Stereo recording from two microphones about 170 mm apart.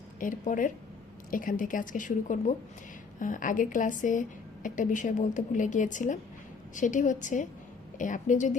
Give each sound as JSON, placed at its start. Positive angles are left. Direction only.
{"t": 0.2, "sound": "a woman's voice", "side_deg": 50}